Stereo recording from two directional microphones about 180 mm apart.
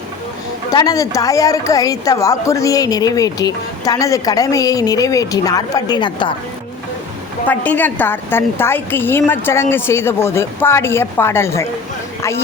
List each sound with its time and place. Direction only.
0.7 s a woman's voice: 20° left (ahead or behind)
7.4 s a woman's voice: 10° left (ahead or behind)